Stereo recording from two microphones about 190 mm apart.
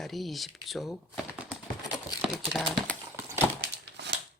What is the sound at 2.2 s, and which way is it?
Clip-clop, centre (ahead or behind).